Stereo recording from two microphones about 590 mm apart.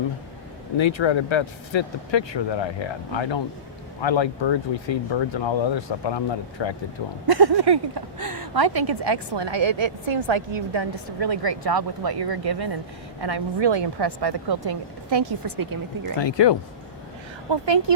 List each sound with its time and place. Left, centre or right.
0.8 s speech: left
7.3 s speech: right
16.1 s speech: left
17.5 s speech: right